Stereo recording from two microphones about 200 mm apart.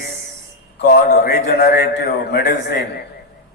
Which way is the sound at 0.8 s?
50° left (ahead or behind).